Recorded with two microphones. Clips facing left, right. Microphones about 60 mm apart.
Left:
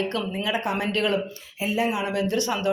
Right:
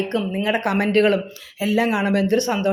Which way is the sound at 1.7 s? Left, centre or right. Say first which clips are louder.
Right 6 dB; right.